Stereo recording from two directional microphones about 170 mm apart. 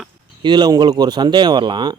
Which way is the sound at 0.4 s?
25° right (ahead or behind).